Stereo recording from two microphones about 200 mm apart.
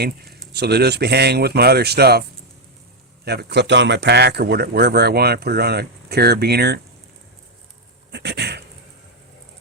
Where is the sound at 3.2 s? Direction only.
55° right (ahead or behind).